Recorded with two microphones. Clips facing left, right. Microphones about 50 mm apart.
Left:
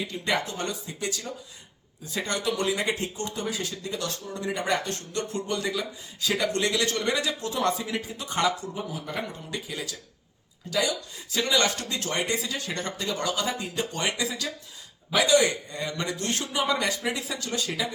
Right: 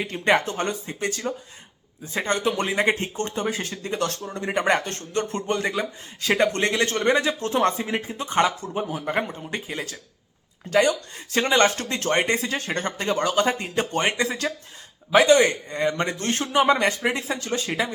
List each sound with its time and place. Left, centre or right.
0.0 s a man's voice: right